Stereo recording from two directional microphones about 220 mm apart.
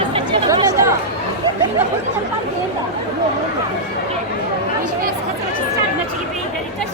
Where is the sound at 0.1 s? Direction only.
20° right (ahead or behind).